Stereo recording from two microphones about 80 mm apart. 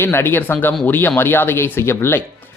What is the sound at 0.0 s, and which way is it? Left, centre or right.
Speech, left.